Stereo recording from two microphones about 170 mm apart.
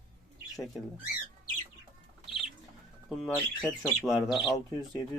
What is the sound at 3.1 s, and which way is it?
Speech, centre (ahead or behind).